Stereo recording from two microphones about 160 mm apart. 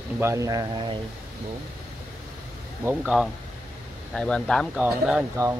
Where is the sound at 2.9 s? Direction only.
5° right (ahead or behind).